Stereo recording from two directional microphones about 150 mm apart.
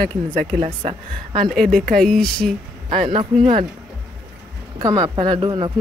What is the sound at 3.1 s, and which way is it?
Speech, 35° right (ahead or behind).